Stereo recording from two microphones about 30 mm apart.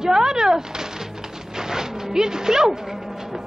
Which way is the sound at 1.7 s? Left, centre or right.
Centre.